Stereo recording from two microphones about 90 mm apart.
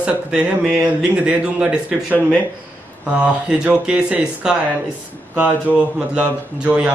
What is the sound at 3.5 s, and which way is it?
Speech, 10° right (ahead or behind).